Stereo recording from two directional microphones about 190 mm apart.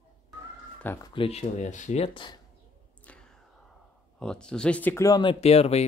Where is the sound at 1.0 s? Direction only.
30° left (ahead or behind).